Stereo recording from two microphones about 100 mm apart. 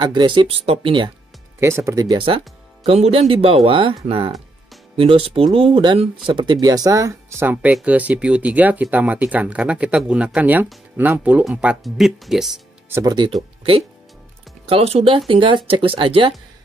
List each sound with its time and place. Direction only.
0.0 s speech: 45° right (ahead or behind)
1.6 s speech: 25° right (ahead or behind)
2.0 s speech: 55° right (ahead or behind); by 11.8 s 10° right (ahead or behind)
11.8 s speech: centre (ahead or behind)
13.0 s speech: 45° right (ahead or behind)
14.7 s speech: 90° right; by 16.3 s 60° right (ahead or behind)